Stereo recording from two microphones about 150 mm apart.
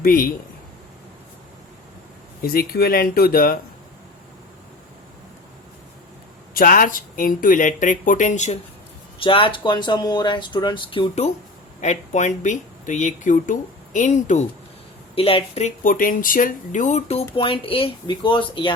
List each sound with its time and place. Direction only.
0.0 s a man's voice: 70° left (ahead or behind)
2.4 s speech: 80° left
6.5 s speech: 70° left (ahead or behind); by 8.5 s 55° left (ahead or behind)
9.1 s speech: 35° left (ahead or behind)
11.8 s speech: 50° left (ahead or behind)
15.1 s speech: 40° left (ahead or behind)
15.8 s speech: 65° left (ahead or behind); by 17.2 s 45° left (ahead or behind)
17.3 s speech: 35° left (ahead or behind)